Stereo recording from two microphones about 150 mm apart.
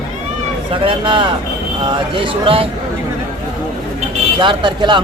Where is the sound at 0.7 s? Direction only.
35° right (ahead or behind).